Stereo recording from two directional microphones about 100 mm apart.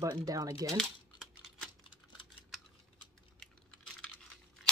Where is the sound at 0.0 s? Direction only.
35° right (ahead or behind).